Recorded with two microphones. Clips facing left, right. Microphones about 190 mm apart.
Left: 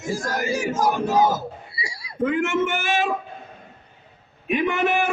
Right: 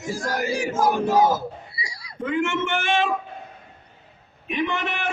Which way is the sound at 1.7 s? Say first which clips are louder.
Left 2 dB; 25° left (ahead or behind).